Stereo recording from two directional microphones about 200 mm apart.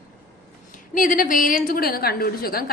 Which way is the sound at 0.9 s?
45° left (ahead or behind).